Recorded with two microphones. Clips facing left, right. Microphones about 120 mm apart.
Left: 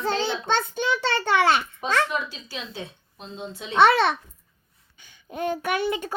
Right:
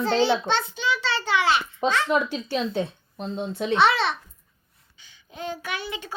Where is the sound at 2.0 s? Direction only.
55° right (ahead or behind).